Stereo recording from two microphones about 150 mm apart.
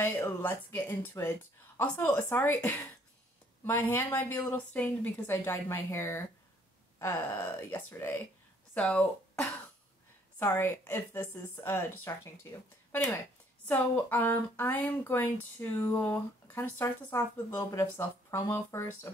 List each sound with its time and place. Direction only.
0.0 s speech: 15° left (ahead or behind)
10.4 s speech: 15° left (ahead or behind)